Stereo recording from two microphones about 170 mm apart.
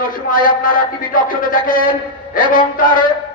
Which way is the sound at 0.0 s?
55° left (ahead or behind).